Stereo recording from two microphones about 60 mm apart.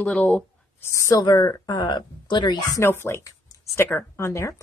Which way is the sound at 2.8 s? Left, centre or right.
Left.